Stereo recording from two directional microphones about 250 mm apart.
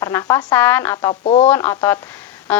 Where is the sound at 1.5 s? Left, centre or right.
Centre.